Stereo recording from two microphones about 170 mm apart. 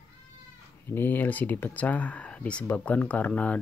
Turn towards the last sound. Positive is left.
turn(degrees=10)  # may be behind; listen again after turning